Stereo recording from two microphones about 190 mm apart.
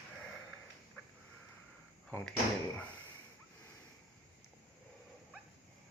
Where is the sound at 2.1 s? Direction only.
10° left (ahead or behind).